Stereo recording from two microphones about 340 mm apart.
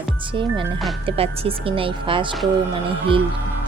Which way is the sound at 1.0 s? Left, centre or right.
Centre.